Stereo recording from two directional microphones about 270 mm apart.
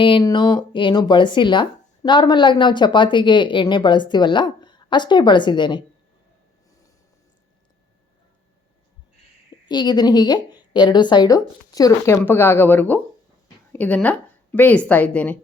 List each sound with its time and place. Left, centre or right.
0.0 s speech: centre
9.6 s a woman's voice: centre